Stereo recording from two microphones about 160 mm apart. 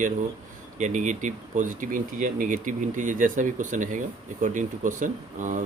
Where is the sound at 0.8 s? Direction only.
50° right (ahead or behind).